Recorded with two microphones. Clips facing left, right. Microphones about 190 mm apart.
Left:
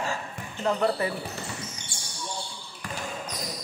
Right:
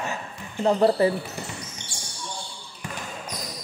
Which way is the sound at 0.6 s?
30° right (ahead or behind).